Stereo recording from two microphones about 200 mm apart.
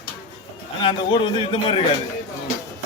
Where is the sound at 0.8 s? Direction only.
25° left (ahead or behind).